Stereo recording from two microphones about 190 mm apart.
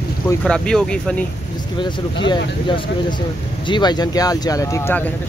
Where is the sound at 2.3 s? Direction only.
25° left (ahead or behind).